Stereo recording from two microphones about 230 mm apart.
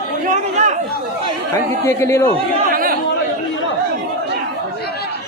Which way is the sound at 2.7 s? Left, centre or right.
Right.